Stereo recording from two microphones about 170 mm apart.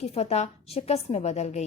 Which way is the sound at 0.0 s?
40° left (ahead or behind).